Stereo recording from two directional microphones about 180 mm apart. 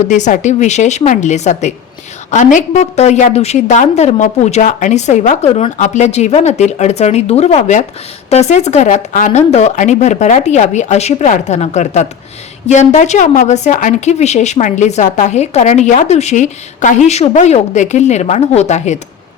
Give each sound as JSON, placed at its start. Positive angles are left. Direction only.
{"t": 0.0, "sound": "a woman's voice", "side_deg": 40}